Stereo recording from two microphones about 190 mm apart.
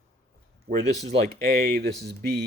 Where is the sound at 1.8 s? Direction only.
60° right (ahead or behind).